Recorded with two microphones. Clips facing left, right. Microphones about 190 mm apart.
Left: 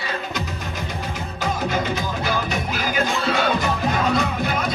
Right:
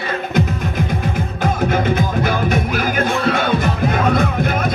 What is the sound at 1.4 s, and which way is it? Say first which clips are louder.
Music: right 5 dB; 55° right (ahead or behind).